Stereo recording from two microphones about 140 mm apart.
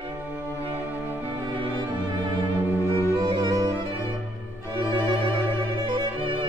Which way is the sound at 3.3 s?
25° right (ahead or behind).